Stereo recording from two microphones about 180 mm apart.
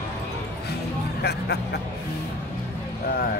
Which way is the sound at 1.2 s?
65° left (ahead or behind).